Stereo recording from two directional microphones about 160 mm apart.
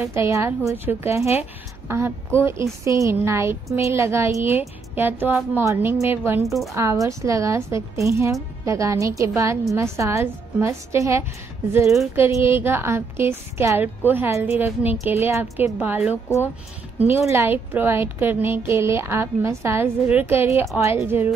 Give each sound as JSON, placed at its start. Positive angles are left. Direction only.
{"t": 0.0, "sound": "a woman's voice", "side_deg": -15}
{"t": 6.4, "sound": "a woman's voice", "side_deg": 0}
{"t": 6.7, "sound": "a woman's voice", "side_deg": -20}
{"t": 17.3, "sound": "a woman's voice", "side_deg": -15}